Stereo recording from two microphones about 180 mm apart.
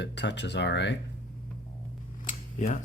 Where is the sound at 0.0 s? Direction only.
75° left (ahead or behind).